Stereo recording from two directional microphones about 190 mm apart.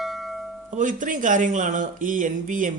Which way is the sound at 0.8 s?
45° right (ahead or behind).